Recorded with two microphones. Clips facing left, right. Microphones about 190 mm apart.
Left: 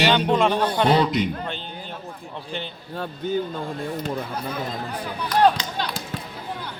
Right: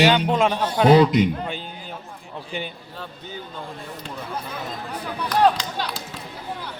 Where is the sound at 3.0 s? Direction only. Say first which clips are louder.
Left 11 dB; 50° left (ahead or behind).